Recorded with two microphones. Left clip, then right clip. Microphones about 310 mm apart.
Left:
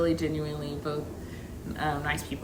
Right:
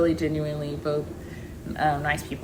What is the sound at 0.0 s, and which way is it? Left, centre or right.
Speech, centre.